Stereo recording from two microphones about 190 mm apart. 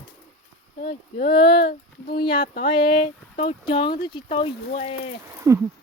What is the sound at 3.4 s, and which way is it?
Speech, 30° left (ahead or behind).